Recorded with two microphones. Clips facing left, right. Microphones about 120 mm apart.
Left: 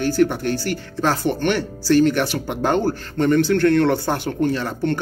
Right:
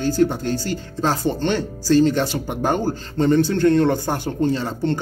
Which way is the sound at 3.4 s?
70° left (ahead or behind).